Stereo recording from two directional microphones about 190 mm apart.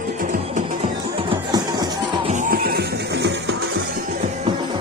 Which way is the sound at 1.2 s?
25° right (ahead or behind).